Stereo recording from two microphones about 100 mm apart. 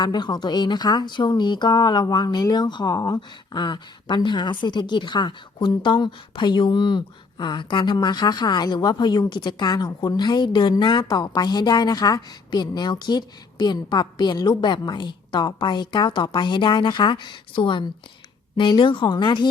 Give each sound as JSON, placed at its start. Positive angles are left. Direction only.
{"t": 0.0, "sound": "speech", "side_deg": 45}